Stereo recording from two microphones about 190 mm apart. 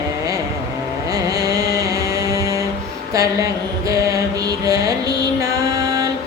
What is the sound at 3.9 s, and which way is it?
Mantra, 15° right (ahead or behind).